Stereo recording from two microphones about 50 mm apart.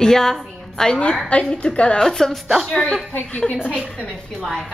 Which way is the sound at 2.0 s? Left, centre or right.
Centre.